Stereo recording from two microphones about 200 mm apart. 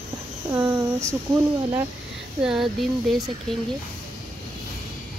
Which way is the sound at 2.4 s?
Centre (ahead or behind).